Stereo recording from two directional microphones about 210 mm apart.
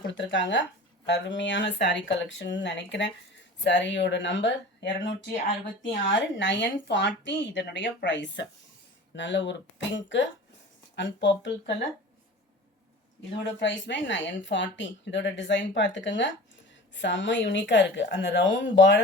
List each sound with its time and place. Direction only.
0.0 s a woman's voice: 60° left (ahead or behind)
13.6 s a woman's voice: 60° left (ahead or behind)